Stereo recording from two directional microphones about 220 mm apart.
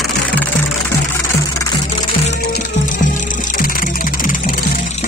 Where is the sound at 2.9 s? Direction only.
35° left (ahead or behind).